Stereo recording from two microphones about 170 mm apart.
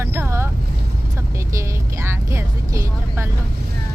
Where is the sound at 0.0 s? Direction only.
15° right (ahead or behind).